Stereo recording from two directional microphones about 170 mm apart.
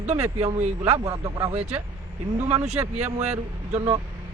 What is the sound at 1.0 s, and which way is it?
Speech, 20° right (ahead or behind).